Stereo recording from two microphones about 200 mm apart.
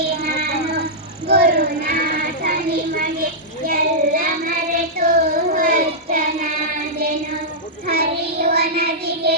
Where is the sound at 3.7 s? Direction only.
45° right (ahead or behind).